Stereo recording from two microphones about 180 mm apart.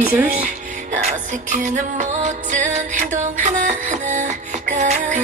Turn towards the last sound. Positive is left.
turn(degrees=-45)  # may be behind; listen again after turning